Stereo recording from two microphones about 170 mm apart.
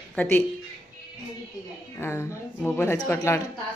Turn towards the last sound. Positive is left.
turn(degrees=15)  # may be behind; listen again after turning